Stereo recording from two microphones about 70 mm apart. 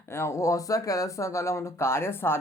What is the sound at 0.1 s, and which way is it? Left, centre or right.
Speech, left.